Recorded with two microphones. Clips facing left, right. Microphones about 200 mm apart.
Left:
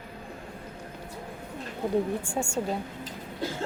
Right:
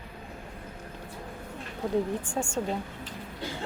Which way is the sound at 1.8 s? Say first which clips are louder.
Left 1 dB; 15° left (ahead or behind).